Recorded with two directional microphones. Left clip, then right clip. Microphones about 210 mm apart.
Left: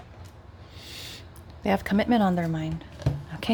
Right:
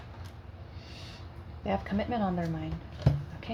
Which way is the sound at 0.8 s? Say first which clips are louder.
Left 9 dB; 45° left (ahead or behind).